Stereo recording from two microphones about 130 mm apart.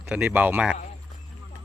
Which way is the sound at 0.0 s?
10° right (ahead or behind).